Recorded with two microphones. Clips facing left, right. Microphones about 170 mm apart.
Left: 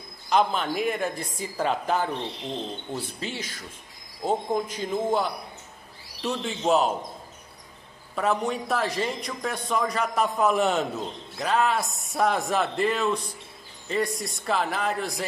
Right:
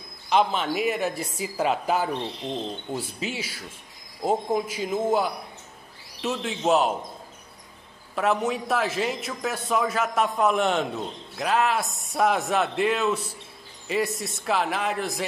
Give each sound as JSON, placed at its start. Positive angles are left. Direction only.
{"t": 0.3, "sound": "a man's voice", "side_deg": 0}
{"t": 8.2, "sound": "a man's voice", "side_deg": -5}